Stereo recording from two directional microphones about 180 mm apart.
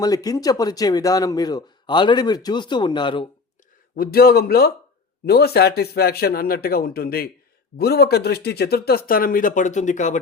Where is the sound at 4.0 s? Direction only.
60° left (ahead or behind).